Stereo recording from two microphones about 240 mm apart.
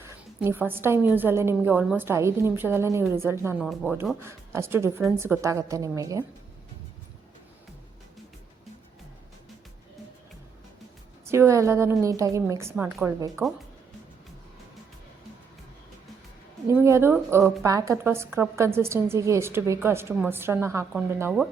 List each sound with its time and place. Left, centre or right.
0.0 s a woman's voice: centre
11.3 s a woman's voice: centre
16.6 s a woman's voice: centre